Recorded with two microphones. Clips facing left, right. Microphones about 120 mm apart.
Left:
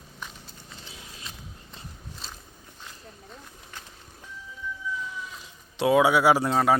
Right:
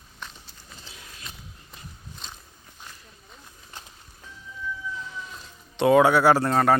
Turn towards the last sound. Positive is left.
turn(degrees=5)  # may be behind; listen again after turning